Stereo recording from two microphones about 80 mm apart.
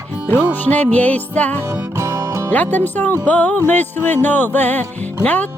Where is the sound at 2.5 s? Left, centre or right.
Left.